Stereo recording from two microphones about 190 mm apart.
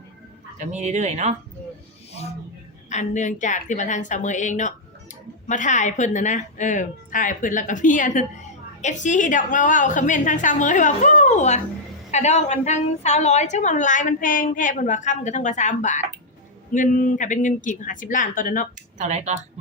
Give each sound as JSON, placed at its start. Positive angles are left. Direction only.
{"t": 0.6, "sound": "speech", "side_deg": -40}
{"t": 2.9, "sound": "a woman's voice", "side_deg": 40}
{"t": 18.9, "sound": "speech", "side_deg": -40}